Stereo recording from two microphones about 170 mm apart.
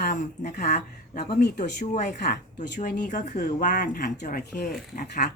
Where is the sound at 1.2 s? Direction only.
70° left (ahead or behind).